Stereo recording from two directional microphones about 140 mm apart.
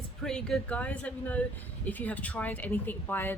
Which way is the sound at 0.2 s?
5° left (ahead or behind).